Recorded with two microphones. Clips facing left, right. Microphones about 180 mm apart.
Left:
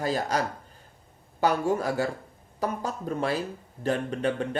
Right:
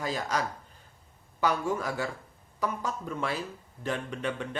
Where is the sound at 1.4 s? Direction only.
40° left (ahead or behind).